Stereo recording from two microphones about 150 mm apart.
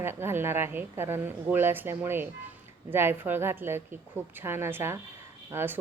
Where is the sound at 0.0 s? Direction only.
15° right (ahead or behind).